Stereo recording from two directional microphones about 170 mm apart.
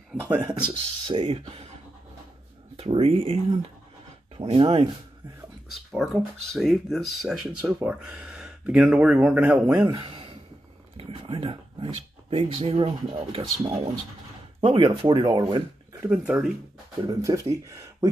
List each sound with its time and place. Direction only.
0.2 s speech: 10° right (ahead or behind)
1.0 s speech: 30° right (ahead or behind)
2.8 s speech: 35° right (ahead or behind)
4.4 s speech: 35° right (ahead or behind)
5.9 s speech: centre (ahead or behind)
9.8 s speech: 30° right (ahead or behind)
16.0 s speech: 5° right (ahead or behind)
17.0 s speech: 20° right (ahead or behind)